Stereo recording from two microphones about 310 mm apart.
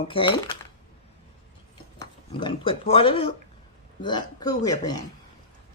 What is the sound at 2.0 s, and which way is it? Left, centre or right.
Speech, centre.